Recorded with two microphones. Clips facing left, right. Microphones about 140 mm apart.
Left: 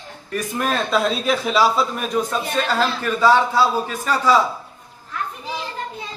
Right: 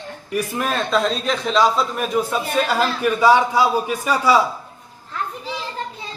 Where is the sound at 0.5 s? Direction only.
Centre (ahead or behind).